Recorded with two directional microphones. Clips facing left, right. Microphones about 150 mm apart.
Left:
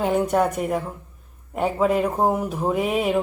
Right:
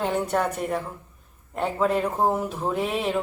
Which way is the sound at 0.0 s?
10° left (ahead or behind).